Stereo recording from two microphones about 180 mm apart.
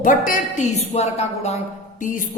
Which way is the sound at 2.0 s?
50° left (ahead or behind).